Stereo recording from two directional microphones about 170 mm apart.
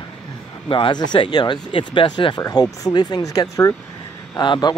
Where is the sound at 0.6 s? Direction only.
30° left (ahead or behind).